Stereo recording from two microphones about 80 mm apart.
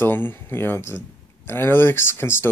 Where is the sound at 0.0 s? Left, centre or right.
Left.